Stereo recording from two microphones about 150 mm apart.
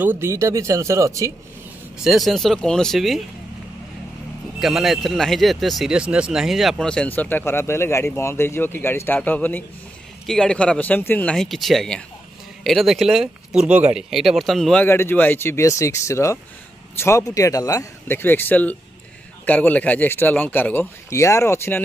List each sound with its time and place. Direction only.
0.0 s speech: 15° right (ahead or behind)
2.0 s speech: centre (ahead or behind)
4.6 s speech: centre (ahead or behind); by 21.8 s 15° left (ahead or behind)